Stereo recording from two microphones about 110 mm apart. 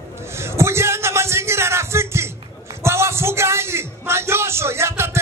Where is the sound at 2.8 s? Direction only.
25° right (ahead or behind).